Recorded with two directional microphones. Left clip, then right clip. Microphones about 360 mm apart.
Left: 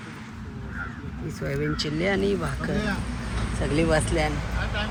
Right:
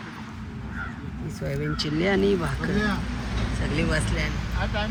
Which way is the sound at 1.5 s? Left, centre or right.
Centre.